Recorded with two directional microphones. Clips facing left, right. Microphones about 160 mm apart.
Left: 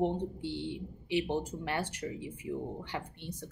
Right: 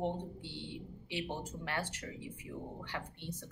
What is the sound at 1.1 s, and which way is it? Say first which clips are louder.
Speech: left 9 dB; 15° left (ahead or behind).